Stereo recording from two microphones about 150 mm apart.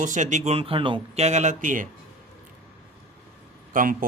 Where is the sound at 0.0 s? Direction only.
55° right (ahead or behind).